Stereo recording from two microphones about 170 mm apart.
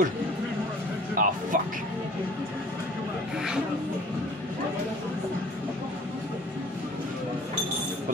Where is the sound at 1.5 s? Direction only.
50° right (ahead or behind).